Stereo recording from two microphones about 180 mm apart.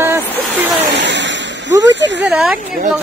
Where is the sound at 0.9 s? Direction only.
80° right.